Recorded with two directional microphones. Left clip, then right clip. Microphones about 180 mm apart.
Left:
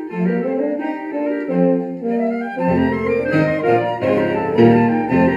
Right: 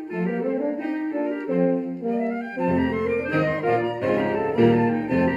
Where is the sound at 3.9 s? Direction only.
20° left (ahead or behind).